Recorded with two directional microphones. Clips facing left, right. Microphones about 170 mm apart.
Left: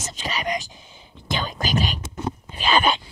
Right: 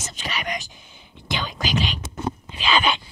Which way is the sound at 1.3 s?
45° left (ahead or behind).